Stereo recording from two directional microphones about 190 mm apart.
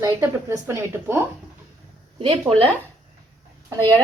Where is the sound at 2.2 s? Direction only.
30° right (ahead or behind).